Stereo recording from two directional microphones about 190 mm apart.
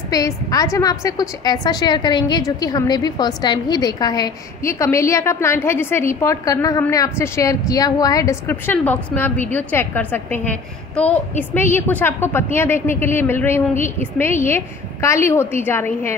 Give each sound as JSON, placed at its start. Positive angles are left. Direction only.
{"t": 0.1, "sound": "a woman's voice", "side_deg": 20}